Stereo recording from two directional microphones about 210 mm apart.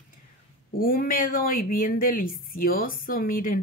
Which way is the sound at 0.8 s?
45° left (ahead or behind).